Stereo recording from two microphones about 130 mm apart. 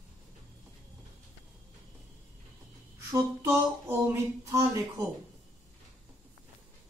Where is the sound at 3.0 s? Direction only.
20° right (ahead or behind).